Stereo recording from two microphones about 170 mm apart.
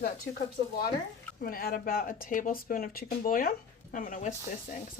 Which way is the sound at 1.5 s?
55° left (ahead or behind).